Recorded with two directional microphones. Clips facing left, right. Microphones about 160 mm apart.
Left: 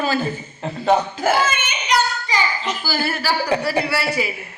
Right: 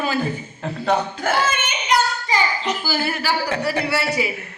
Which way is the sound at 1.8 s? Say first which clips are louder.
Even; 50° right (ahead or behind).